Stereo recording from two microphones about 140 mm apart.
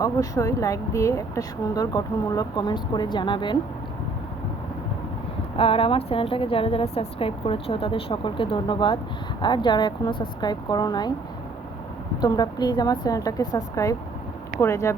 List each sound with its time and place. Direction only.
0.0 s speech: 25° left (ahead or behind)
5.5 s a woman's voice: 45° left (ahead or behind)
12.2 s speech: 30° left (ahead or behind)